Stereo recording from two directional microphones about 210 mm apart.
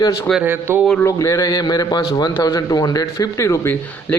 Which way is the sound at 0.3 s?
5° right (ahead or behind).